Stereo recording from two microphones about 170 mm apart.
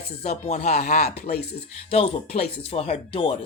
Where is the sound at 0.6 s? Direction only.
65° left (ahead or behind).